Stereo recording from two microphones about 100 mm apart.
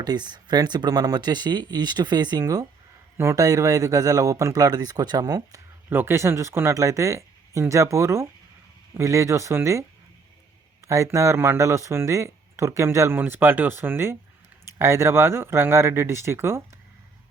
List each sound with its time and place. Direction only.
0.0 s speech: 45° right (ahead or behind)
5.9 s speech: 25° right (ahead or behind)
10.8 s speech: 30° right (ahead or behind)